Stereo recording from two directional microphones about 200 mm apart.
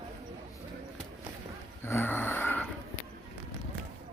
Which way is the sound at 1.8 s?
10° left (ahead or behind).